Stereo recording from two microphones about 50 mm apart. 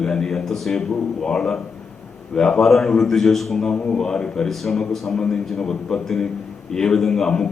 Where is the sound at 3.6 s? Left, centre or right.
Centre.